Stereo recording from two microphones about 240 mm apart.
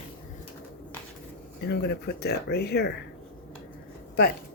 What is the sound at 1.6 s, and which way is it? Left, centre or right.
Speech, left.